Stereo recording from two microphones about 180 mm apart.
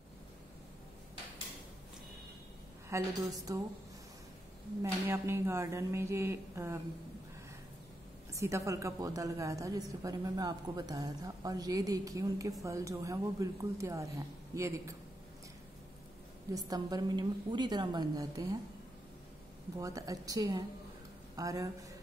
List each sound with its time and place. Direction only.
2.9 s a woman's voice: 15° right (ahead or behind)
5.0 s speech: 15° right (ahead or behind)
8.3 s a woman's voice: 15° right (ahead or behind)
16.5 s a woman's voice: 20° right (ahead or behind)
19.8 s a woman's voice: 20° right (ahead or behind)